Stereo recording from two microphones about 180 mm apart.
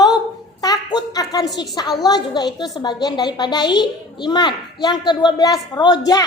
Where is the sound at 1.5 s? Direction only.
25° left (ahead or behind).